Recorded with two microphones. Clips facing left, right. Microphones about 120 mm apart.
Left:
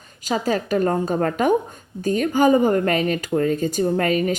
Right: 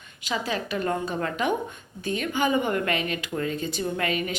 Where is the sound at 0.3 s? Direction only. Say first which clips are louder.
Left 7 dB; 40° left (ahead or behind).